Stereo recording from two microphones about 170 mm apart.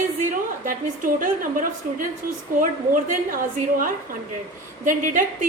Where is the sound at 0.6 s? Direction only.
50° right (ahead or behind).